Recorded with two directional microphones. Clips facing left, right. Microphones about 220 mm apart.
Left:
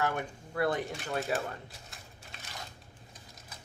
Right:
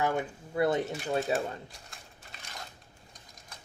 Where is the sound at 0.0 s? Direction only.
20° right (ahead or behind).